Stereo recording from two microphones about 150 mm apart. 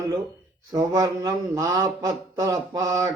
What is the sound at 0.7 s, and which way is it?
Speech, 25° right (ahead or behind).